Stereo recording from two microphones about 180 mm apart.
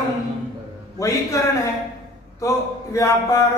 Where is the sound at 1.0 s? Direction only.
15° left (ahead or behind).